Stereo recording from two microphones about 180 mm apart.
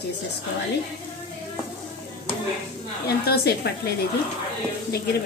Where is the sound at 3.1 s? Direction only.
65° left (ahead or behind).